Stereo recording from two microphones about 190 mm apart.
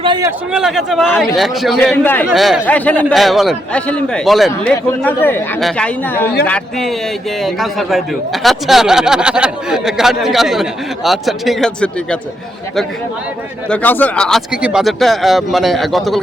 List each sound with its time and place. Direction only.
0.0 s a man's voice: 25° right (ahead or behind)
0.3 s a man's voice: 5° right (ahead or behind)
13.7 s a man's voice: 10° left (ahead or behind)